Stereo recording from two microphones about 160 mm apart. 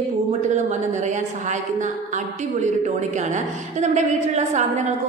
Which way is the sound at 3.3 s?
45° right (ahead or behind).